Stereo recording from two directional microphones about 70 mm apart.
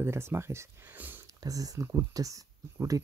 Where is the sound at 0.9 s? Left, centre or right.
Right.